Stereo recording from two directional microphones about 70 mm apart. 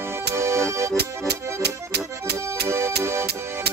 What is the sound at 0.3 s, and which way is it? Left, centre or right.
Accordion, right.